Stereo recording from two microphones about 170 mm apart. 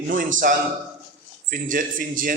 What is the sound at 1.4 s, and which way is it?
Speech, 55° right (ahead or behind).